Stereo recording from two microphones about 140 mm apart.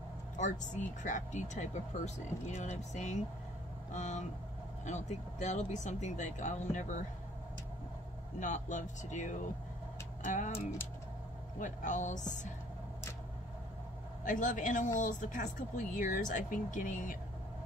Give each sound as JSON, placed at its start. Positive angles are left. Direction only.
{"t": 0.4, "sound": "speech", "side_deg": 60}
{"t": 8.4, "sound": "speech", "side_deg": 60}
{"t": 14.2, "sound": "speech", "side_deg": 70}